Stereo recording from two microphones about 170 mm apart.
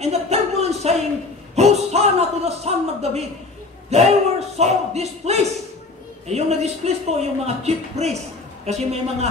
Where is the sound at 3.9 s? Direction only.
40° right (ahead or behind).